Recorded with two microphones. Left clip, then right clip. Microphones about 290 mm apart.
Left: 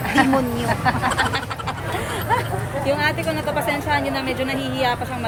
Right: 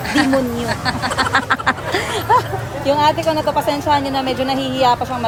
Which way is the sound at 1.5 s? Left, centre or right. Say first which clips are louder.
Right 11 dB; right.